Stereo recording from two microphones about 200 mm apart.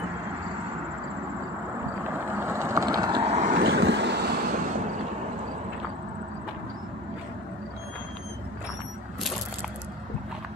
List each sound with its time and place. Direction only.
2.2 s vehicle: 10° right (ahead or behind)
3.5 s vehicle: 65° right (ahead or behind)